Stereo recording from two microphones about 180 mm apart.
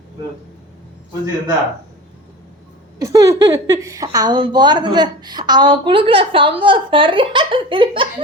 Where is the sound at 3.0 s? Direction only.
20° right (ahead or behind).